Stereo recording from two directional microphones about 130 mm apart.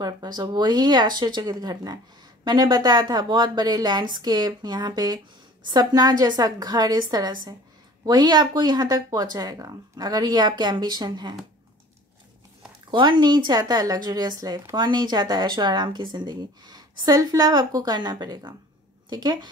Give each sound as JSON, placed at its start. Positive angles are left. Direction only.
{"t": 0.0, "sound": "speech", "side_deg": -30}
{"t": 12.9, "sound": "speech", "side_deg": -35}